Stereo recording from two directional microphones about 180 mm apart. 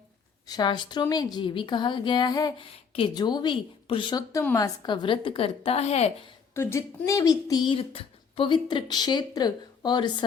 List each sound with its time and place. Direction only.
0.4 s speech: 20° left (ahead or behind)
6.5 s speech: 15° left (ahead or behind)